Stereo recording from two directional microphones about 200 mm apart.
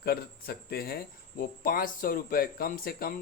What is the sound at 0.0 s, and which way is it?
Speech, 50° left (ahead or behind).